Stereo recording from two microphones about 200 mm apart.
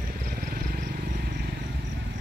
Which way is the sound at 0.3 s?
45° right (ahead or behind).